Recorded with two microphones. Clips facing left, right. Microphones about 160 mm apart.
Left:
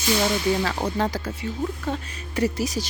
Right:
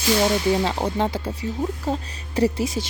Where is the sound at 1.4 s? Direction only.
35° right (ahead or behind).